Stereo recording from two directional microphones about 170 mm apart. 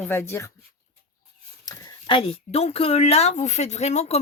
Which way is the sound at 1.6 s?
30° left (ahead or behind).